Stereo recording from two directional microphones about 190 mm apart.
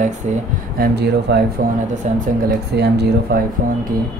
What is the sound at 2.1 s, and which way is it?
Speech, 40° right (ahead or behind).